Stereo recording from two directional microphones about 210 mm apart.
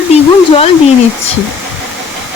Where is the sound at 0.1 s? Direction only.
30° left (ahead or behind).